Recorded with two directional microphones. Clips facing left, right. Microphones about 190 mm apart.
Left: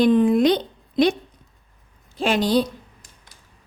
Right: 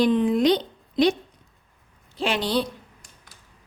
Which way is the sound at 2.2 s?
45° left (ahead or behind).